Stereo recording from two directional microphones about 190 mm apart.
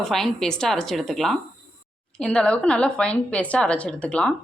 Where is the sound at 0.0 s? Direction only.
Centre (ahead or behind).